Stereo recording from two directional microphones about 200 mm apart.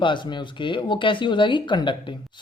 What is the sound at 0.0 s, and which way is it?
Speech, 25° left (ahead or behind).